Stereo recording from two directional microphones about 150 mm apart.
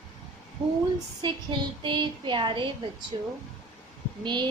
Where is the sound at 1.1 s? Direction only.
30° right (ahead or behind).